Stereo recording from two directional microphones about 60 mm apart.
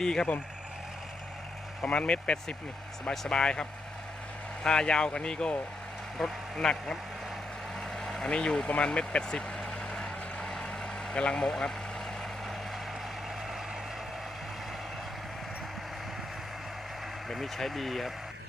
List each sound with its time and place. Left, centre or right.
0.0 s speech: centre
1.8 s speech: centre
7.9 s vehicle: centre
8.3 s speech: centre
9.6 s vehicle: centre
17.2 s speech: centre